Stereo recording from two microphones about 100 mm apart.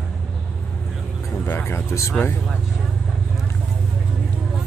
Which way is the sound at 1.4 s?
20° left (ahead or behind).